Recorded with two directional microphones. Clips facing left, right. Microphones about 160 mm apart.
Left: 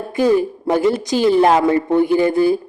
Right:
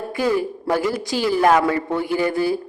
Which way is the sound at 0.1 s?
20° left (ahead or behind).